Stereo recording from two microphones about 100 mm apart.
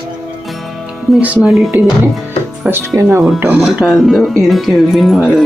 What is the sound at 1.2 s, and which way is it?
Speech, 10° right (ahead or behind).